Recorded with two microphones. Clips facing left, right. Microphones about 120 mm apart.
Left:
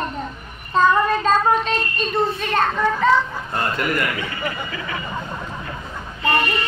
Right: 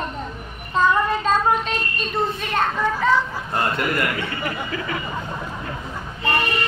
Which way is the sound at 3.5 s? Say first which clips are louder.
Even; 20° right (ahead or behind).